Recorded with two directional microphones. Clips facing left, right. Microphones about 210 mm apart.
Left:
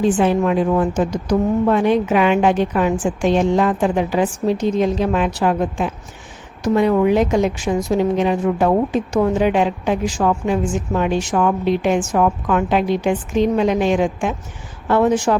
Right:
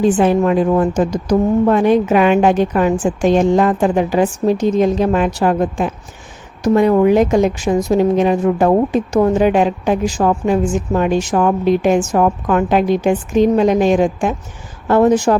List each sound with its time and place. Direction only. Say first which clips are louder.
0.0 s a woman's voice: right 3 dB; 45° right (ahead or behind)